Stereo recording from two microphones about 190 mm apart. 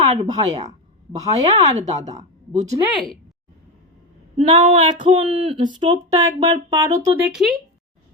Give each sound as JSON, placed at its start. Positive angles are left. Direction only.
{"t": 0.1, "sound": "speech", "side_deg": -35}
{"t": 1.2, "sound": "speech", "side_deg": -20}
{"t": 2.5, "sound": "speech", "side_deg": -35}
{"t": 4.4, "sound": "speech", "side_deg": -30}